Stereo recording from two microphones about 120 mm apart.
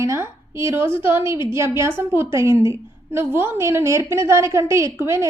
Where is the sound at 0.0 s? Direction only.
25° right (ahead or behind).